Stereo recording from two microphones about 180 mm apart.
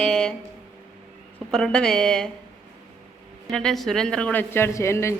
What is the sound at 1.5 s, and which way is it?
Speech, centre (ahead or behind).